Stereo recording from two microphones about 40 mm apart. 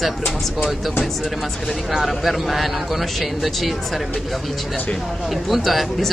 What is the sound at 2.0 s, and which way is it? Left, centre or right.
Speech, centre.